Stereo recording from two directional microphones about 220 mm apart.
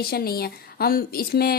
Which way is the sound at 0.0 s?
45° left (ahead or behind).